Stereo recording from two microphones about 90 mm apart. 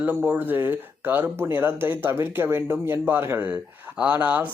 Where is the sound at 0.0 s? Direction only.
20° right (ahead or behind).